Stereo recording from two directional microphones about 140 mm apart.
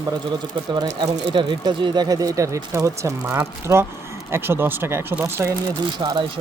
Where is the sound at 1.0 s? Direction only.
30° right (ahead or behind).